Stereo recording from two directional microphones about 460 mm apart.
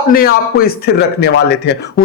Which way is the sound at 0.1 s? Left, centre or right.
Centre.